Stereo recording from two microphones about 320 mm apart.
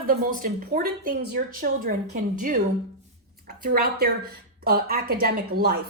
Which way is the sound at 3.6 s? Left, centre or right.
Right.